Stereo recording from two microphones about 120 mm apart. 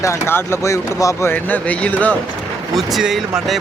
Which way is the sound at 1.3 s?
15° left (ahead or behind).